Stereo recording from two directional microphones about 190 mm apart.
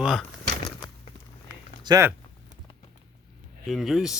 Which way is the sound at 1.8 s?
20° right (ahead or behind).